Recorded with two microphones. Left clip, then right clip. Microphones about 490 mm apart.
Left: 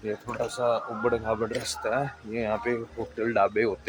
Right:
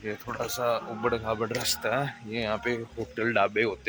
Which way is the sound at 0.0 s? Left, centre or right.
Right.